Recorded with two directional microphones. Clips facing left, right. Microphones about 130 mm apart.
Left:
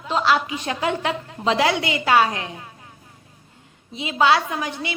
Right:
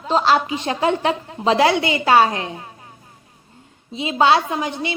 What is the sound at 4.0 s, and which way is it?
Speech, 30° right (ahead or behind).